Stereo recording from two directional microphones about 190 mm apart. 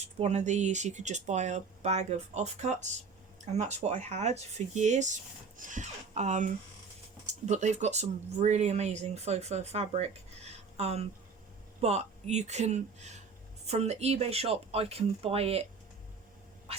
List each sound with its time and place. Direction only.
0.0 s speech: 35° right (ahead or behind)